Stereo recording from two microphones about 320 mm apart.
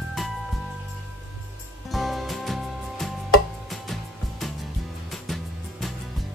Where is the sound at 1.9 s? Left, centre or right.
Centre.